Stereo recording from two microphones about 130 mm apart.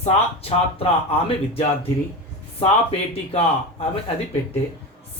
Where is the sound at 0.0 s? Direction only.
50° left (ahead or behind).